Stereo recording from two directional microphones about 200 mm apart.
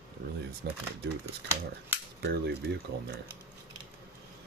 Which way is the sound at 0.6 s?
55° right (ahead or behind).